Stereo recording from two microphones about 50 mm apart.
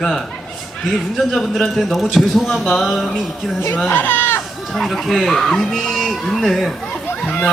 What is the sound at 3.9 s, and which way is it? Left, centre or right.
Speech, left.